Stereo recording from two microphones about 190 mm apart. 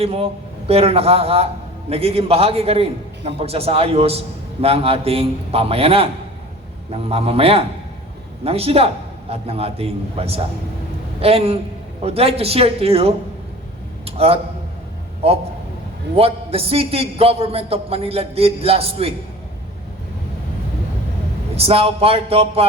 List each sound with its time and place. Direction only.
0.0 s a man's voice: 30° right (ahead or behind)
21.5 s a man's voice: 30° right (ahead or behind)